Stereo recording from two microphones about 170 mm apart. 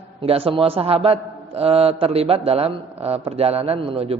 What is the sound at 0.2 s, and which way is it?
A man's voice, 35° right (ahead or behind).